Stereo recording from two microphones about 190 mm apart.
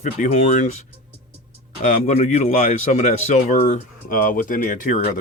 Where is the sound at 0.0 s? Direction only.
40° left (ahead or behind).